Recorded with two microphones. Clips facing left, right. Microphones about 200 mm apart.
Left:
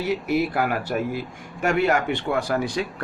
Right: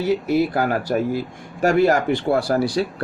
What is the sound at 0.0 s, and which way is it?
A man's voice, 30° right (ahead or behind).